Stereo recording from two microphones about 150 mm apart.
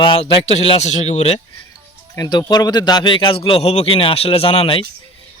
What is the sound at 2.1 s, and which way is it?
A man's voice, 25° left (ahead or behind).